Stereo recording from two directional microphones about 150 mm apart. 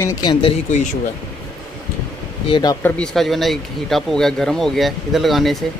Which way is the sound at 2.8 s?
5° left (ahead or behind).